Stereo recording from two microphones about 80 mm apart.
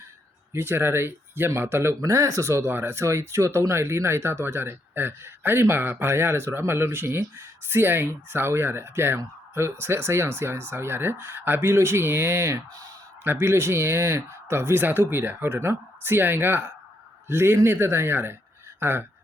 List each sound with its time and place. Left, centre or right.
0.5 s speech: right
18.8 s honk: right